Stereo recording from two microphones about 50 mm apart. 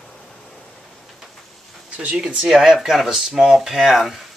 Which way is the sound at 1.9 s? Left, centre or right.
Right.